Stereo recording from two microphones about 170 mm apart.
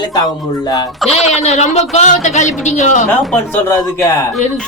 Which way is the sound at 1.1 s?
40° left (ahead or behind).